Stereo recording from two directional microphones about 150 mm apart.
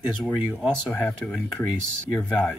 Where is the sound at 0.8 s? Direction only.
5° left (ahead or behind).